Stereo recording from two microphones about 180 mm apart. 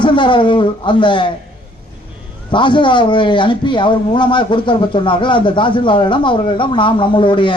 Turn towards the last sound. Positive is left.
turn(degrees=25)  # may be behind; listen again after turning